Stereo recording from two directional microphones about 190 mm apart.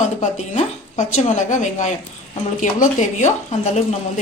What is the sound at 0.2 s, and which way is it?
A woman's voice, 40° left (ahead or behind).